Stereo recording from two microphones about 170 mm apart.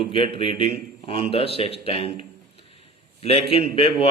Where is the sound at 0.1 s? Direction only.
35° left (ahead or behind).